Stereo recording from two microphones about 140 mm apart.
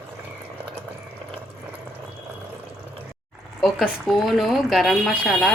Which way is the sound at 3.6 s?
Centre (ahead or behind).